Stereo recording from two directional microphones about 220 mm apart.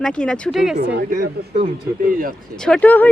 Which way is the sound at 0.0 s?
5° left (ahead or behind).